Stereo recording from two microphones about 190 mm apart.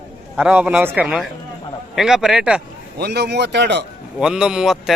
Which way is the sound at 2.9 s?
60° right (ahead or behind).